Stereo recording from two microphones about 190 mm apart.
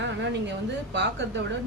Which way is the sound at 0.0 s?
70° right (ahead or behind).